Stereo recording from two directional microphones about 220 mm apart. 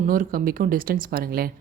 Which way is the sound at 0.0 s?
40° right (ahead or behind).